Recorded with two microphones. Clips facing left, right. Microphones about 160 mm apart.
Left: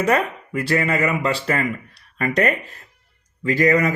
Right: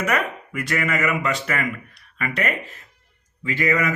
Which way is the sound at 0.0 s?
30° left (ahead or behind).